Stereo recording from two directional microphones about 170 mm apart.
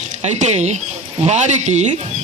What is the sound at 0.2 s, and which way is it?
A man's voice, 40° right (ahead or behind).